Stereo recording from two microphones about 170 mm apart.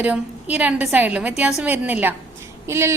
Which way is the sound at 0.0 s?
10° right (ahead or behind).